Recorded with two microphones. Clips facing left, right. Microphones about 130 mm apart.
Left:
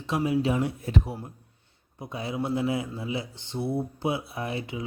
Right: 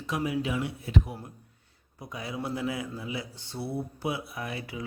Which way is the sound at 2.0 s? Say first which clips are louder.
Left 4 dB; 25° left (ahead or behind).